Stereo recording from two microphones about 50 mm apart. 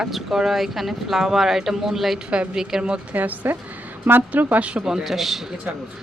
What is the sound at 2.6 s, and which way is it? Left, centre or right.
Speech, centre.